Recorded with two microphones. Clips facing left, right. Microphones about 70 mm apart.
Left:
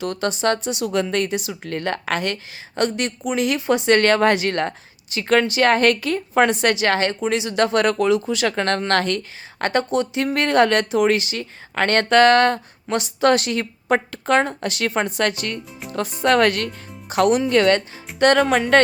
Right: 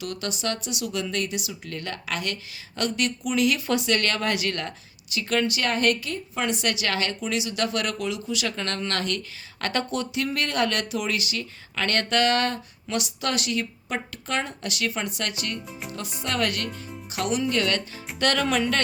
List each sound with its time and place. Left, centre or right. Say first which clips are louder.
0.0 s speech: left 9 dB; left
6.1 s a woman's voice: left 11 dB; left
6.5 s speech: left 8 dB; left